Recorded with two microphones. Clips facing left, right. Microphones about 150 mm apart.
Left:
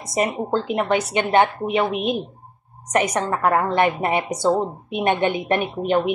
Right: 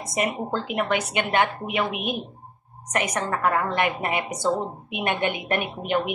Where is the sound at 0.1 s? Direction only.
35° left (ahead or behind).